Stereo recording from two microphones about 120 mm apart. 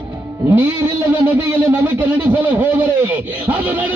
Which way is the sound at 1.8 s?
15° right (ahead or behind).